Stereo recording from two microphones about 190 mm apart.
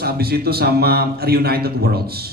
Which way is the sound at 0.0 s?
55° right (ahead or behind).